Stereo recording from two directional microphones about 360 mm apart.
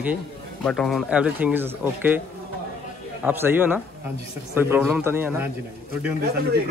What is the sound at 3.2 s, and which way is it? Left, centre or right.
Speech, centre.